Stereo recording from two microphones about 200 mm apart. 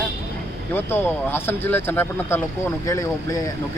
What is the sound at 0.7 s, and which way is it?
Speech, 10° left (ahead or behind).